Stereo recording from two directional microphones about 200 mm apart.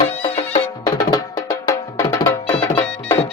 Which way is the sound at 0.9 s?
15° left (ahead or behind).